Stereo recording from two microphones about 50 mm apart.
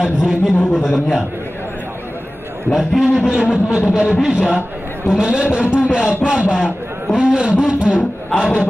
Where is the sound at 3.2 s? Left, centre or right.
Centre.